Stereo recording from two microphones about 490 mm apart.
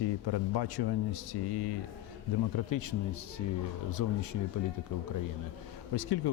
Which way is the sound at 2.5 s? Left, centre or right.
Left.